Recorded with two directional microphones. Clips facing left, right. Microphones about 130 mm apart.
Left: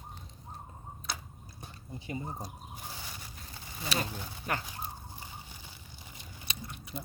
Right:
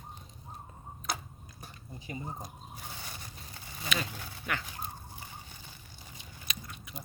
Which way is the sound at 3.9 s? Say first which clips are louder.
Left 1 dB; 35° left (ahead or behind).